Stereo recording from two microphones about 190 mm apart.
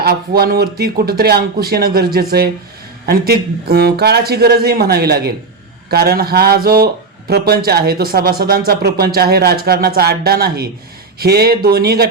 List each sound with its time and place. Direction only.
0.0 s speech: 55° right (ahead or behind)
3.1 s speech: 55° right (ahead or behind)